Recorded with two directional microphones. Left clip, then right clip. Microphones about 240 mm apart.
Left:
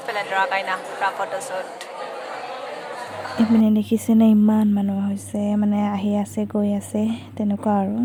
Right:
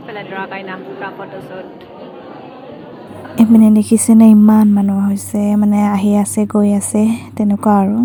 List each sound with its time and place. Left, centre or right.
0.1 s a woman's voice: left
3.3 s a woman's voice: right